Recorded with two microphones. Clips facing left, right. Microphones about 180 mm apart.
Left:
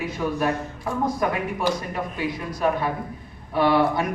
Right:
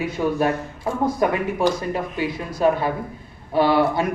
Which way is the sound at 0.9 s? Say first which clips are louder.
Right 2 dB; 25° right (ahead or behind).